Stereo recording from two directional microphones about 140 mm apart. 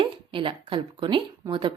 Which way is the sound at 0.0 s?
35° right (ahead or behind).